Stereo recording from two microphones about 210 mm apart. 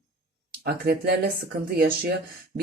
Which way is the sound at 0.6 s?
50° right (ahead or behind).